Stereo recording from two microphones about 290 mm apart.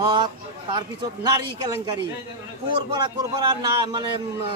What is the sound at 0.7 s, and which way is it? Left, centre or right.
Speech, centre.